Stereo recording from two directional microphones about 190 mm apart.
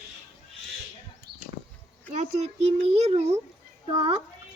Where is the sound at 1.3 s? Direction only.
60° right (ahead or behind).